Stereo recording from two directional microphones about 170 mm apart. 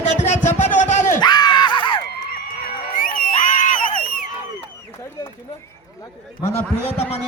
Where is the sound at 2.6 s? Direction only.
55° left (ahead or behind).